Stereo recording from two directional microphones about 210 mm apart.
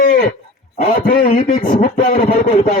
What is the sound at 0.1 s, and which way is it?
Wild animals, 35° left (ahead or behind).